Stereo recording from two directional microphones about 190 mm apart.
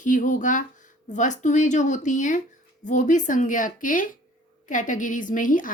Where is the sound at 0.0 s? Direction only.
45° left (ahead or behind).